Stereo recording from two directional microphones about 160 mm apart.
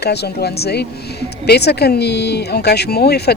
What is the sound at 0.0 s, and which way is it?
A woman's voice, 90° left.